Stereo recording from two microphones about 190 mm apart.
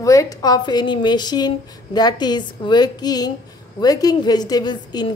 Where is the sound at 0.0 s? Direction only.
15° left (ahead or behind).